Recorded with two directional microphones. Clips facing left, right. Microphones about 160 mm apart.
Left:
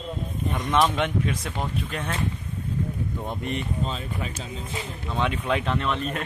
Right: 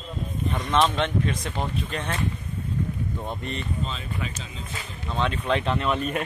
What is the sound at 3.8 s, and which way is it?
Speech, 40° left (ahead or behind).